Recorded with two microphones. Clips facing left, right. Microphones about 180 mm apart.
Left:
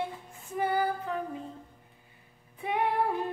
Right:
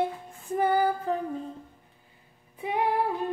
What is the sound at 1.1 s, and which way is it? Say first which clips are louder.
Music: right 5 dB; 35° right (ahead or behind).